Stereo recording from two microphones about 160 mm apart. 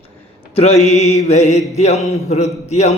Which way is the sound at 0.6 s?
40° left (ahead or behind).